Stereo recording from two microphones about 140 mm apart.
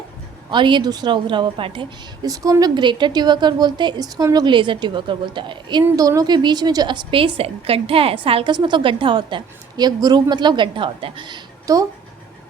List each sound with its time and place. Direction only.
0.5 s a woman's voice: 35° right (ahead or behind)
5.8 s a woman's voice: 25° right (ahead or behind)